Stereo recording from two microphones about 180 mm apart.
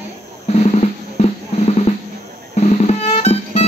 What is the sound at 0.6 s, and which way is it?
Drum, 35° left (ahead or behind).